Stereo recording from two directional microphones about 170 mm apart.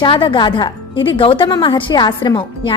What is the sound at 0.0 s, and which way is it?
A woman's voice, 30° left (ahead or behind).